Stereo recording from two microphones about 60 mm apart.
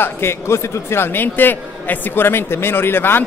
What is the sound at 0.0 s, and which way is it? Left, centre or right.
Speech, left.